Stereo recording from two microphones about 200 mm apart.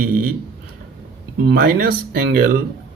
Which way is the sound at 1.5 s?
45° right (ahead or behind).